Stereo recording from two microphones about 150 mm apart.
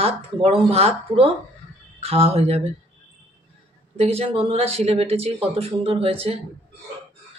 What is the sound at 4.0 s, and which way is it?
Speech, 40° right (ahead or behind).